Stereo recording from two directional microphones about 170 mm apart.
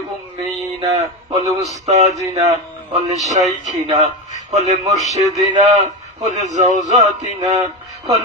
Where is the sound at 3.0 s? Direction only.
45° right (ahead or behind).